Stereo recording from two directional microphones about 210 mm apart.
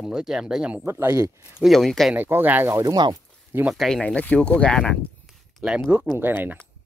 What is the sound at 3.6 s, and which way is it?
Speech, centre (ahead or behind).